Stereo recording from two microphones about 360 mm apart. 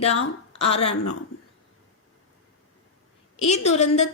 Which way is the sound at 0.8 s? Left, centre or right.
Left.